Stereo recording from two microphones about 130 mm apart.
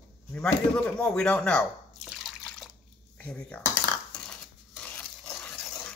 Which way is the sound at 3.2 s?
10° left (ahead or behind).